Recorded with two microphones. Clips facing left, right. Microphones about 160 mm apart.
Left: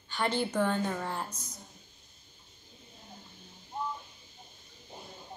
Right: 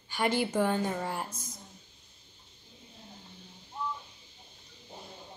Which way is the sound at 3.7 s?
45° left (ahead or behind).